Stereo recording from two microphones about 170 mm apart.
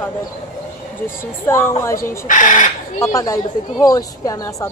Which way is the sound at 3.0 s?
20° left (ahead or behind).